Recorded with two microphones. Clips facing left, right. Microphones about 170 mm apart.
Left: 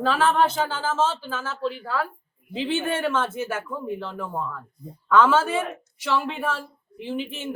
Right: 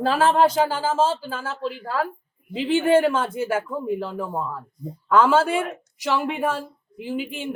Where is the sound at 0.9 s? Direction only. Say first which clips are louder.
Right 3 dB; 35° right (ahead or behind).